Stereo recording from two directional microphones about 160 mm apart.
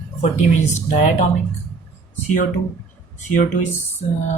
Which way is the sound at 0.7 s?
50° left (ahead or behind).